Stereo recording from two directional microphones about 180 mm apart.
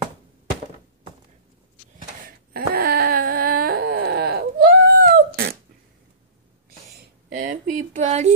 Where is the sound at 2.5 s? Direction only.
55° right (ahead or behind).